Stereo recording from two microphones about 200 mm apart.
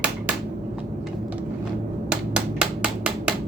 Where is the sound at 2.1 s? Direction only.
5° right (ahead or behind).